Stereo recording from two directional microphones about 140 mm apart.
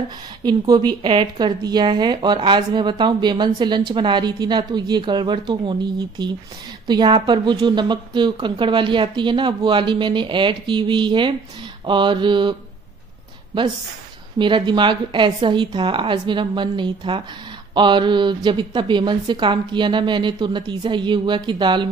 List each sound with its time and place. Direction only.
0.4 s speech: 30° right (ahead or behind)
14.4 s speech: 35° right (ahead or behind)